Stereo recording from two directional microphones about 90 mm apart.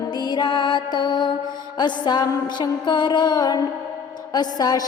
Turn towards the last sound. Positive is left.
turn(degrees=45)  # may be behind; listen again after turning